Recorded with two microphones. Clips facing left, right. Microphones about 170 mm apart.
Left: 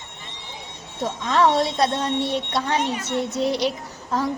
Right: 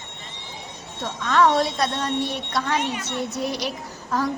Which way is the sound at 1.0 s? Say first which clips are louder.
Even; 25° left (ahead or behind).